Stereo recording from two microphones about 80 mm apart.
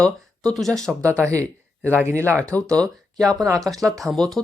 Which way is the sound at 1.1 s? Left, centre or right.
Right.